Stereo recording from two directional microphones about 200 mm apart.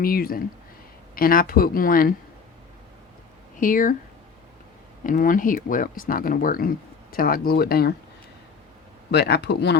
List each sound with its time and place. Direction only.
0.0 s speech: 45° left (ahead or behind)
3.6 s speech: 40° left (ahead or behind)
5.0 s speech: 45° left (ahead or behind)
9.1 s speech: 55° left (ahead or behind)